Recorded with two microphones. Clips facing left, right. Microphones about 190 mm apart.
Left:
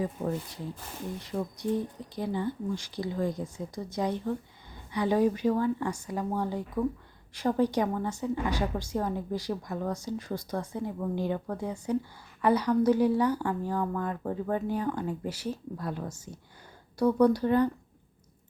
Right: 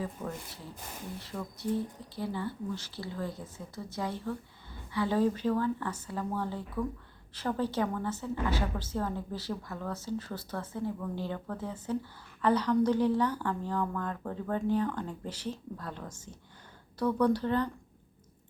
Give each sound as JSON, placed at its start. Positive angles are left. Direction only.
{"t": 0.2, "sound": "speech", "side_deg": 35}
{"t": 1.5, "sound": "speech", "side_deg": 15}